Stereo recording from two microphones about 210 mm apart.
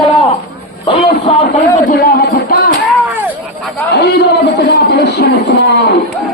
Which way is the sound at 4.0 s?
50° left (ahead or behind).